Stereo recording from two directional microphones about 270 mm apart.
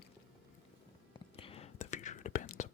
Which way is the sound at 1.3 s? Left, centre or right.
Left.